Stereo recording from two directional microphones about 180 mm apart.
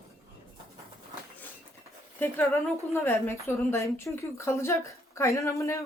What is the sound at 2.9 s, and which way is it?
A woman's voice, 15° left (ahead or behind).